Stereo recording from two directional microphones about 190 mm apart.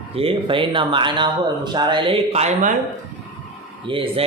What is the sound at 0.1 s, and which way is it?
A man's voice, 30° right (ahead or behind).